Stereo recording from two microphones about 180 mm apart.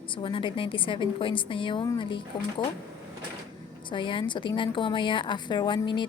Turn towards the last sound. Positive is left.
turn(degrees=25)  # may be behind; listen again after turning